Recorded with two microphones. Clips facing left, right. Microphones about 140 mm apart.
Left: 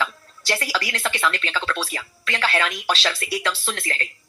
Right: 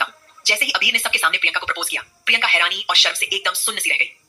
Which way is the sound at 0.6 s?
40° left (ahead or behind).